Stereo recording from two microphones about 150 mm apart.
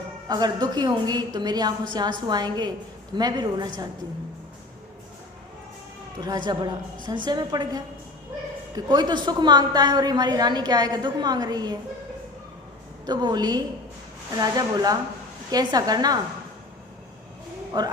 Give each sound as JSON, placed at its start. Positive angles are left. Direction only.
{"t": 0.3, "sound": "a woman's voice", "side_deg": -30}
{"t": 6.1, "sound": "a woman's voice", "side_deg": -30}
{"t": 13.1, "sound": "a woman's voice", "side_deg": -30}
{"t": 17.7, "sound": "a woman's voice", "side_deg": -30}